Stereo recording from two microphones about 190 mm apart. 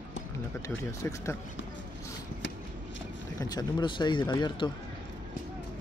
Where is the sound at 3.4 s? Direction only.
20° left (ahead or behind).